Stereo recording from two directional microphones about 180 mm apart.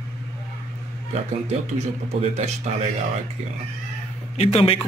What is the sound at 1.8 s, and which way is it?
Speech, 40° right (ahead or behind).